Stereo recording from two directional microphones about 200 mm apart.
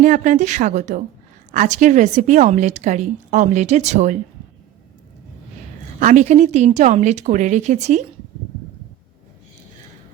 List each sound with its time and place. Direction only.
0.0 s a woman's voice: 40° right (ahead or behind)
6.0 s a woman's voice: 35° right (ahead or behind)